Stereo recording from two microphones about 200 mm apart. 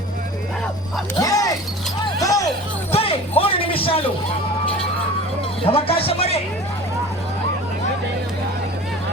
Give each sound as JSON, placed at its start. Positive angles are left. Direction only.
{"t": 1.2, "sound": "a sound", "side_deg": 15}
{"t": 2.2, "sound": "music", "side_deg": 15}
{"t": 2.9, "sound": "music", "side_deg": 30}
{"t": 5.6, "sound": "speech", "side_deg": 30}